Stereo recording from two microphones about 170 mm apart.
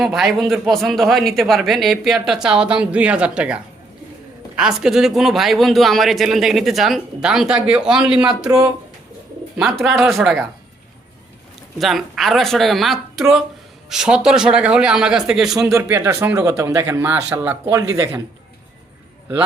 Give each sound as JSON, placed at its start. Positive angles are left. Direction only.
{"t": 0.0, "sound": "speech", "side_deg": 0}
{"t": 8.4, "sound": "speech", "side_deg": -20}
{"t": 9.8, "sound": "speech", "side_deg": 0}
{"t": 11.8, "sound": "speech", "side_deg": 0}
{"t": 15.6, "sound": "a man's voice", "side_deg": -15}